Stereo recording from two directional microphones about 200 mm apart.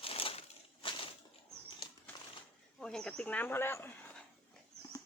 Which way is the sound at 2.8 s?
5° left (ahead or behind).